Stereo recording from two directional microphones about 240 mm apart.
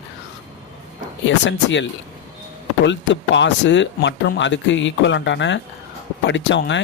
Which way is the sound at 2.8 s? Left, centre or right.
Left.